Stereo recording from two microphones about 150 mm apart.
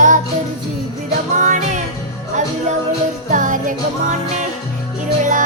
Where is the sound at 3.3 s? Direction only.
60° right (ahead or behind).